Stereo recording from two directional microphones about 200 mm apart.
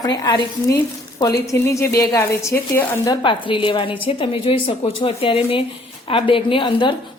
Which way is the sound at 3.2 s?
25° left (ahead or behind).